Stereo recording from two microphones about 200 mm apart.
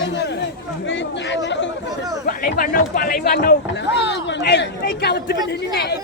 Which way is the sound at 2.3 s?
45° left (ahead or behind).